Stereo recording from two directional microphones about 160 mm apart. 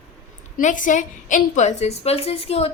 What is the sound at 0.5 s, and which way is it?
A woman's voice, 55° left (ahead or behind).